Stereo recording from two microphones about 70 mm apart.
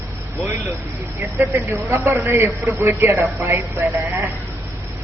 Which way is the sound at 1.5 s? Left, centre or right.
Right.